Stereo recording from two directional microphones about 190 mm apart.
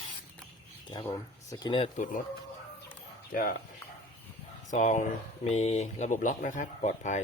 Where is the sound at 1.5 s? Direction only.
25° left (ahead or behind).